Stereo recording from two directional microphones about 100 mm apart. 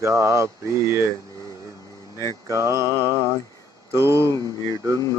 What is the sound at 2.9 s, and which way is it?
Mantra, 30° left (ahead or behind).